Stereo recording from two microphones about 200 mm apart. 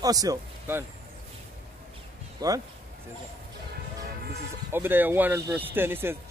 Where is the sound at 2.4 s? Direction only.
20° right (ahead or behind).